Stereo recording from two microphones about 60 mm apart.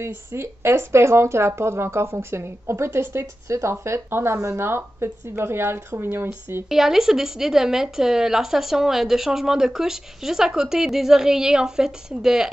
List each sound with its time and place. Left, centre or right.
0.0 s speech: right
3.4 s speech: right
6.7 s speech: centre